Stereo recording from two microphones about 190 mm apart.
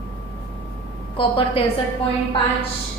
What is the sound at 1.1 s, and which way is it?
Speech, 25° left (ahead or behind).